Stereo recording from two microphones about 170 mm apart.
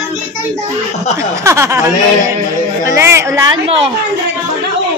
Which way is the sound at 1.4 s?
15° right (ahead or behind).